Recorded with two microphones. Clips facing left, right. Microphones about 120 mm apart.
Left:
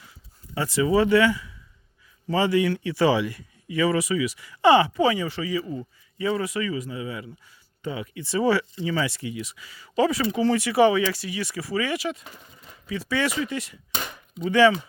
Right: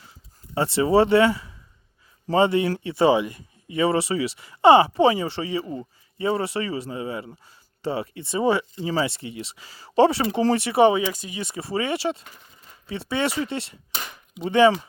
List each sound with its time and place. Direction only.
0.5 s speech: 30° right (ahead or behind)